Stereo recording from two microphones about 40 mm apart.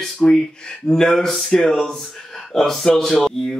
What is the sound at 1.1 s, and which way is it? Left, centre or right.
Speech, centre.